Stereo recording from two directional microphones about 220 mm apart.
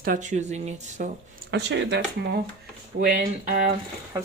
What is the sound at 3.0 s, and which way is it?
Speech, 40° right (ahead or behind).